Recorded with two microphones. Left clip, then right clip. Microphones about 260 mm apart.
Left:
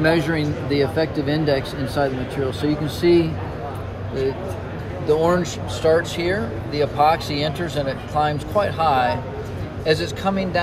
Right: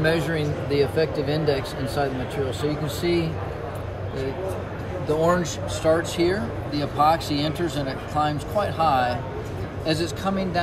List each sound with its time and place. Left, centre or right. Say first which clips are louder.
0.0 s speech: left 4 dB; centre
5.0 s speech: left 3 dB; left